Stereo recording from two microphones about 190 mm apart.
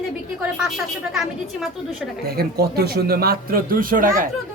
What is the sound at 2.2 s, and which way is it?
Speech, 55° right (ahead or behind).